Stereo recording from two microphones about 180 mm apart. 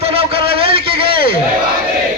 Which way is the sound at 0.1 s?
30° right (ahead or behind).